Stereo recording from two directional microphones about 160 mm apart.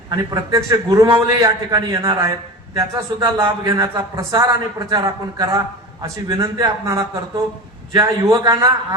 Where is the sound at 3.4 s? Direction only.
25° right (ahead or behind).